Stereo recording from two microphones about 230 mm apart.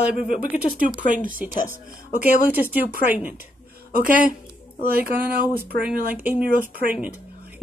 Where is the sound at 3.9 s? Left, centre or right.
Right.